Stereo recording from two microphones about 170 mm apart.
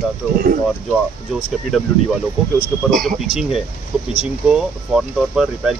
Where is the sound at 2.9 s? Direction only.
Centre (ahead or behind).